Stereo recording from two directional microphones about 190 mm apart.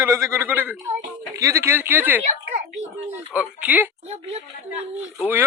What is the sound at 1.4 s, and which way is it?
Speech, 15° right (ahead or behind).